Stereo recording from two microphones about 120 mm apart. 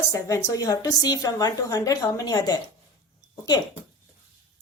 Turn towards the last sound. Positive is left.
turn(degrees=35)  # may be behind; listen again after turning